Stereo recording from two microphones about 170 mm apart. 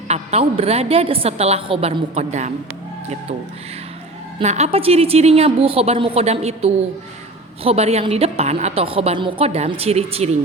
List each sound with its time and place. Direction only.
0.1 s a woman's voice: 40° right (ahead or behind)
4.4 s a woman's voice: 40° right (ahead or behind)